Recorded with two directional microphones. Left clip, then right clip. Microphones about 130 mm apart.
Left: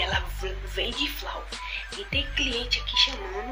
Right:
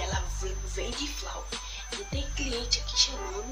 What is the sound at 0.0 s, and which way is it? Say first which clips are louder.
Music: left 6 dB; 10° right (ahead or behind).